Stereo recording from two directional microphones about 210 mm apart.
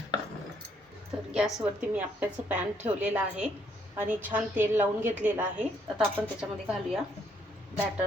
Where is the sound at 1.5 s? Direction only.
5° right (ahead or behind).